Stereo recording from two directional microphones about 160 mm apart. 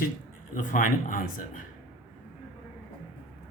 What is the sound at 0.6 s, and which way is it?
A man's voice, 60° left (ahead or behind).